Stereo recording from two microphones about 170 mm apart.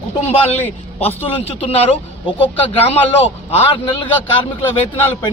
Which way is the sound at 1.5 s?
35° left (ahead or behind).